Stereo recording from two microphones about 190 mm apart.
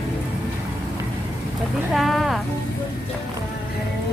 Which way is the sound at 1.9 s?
Centre (ahead or behind).